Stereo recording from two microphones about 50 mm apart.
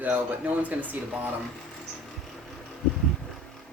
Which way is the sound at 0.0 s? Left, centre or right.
Right.